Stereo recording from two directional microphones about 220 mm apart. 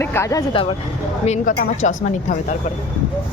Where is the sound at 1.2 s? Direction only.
35° left (ahead or behind).